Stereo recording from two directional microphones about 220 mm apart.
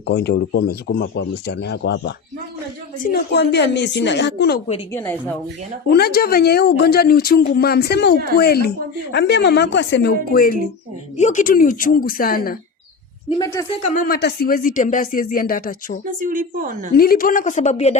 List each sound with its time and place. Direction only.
0.1 s speech: 50° left (ahead or behind)
4.9 s speech: 10° left (ahead or behind)
5.9 s speech: 45° left (ahead or behind)
13.4 s speech: 15° left (ahead or behind)
13.9 s speech: 45° left (ahead or behind)
16.0 s speech: 40° right (ahead or behind)
16.9 s speech: 40° left (ahead or behind)